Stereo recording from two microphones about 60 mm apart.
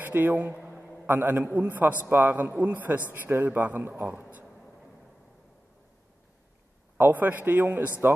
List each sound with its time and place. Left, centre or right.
0.0 s a man's voice: right
0.6 s a sound: centre
1.0 s a man's voice: right
2.0 s a man's voice: right
2.5 s a man's voice: right
4.2 s a sound: right
7.0 s a man's voice: right